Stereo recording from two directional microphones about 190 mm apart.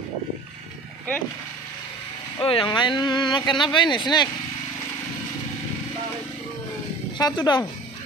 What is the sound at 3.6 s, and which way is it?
Speech, 25° left (ahead or behind).